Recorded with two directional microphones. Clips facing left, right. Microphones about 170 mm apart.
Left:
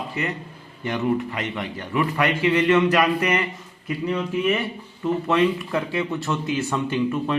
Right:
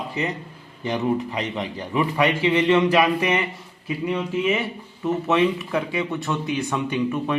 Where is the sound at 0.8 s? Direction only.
25° right (ahead or behind).